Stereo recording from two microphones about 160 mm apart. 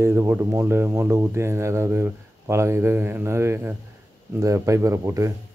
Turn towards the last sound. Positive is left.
turn(degrees=-20)  # may be behind; listen again after turning